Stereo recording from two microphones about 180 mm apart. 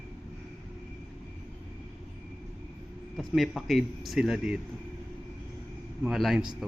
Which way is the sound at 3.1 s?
Centre (ahead or behind).